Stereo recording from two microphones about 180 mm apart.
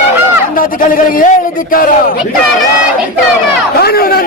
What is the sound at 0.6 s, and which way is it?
A man's voice, 50° left (ahead or behind).